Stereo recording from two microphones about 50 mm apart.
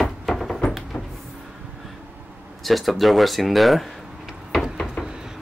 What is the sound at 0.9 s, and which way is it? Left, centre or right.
Cupboard open or close, left.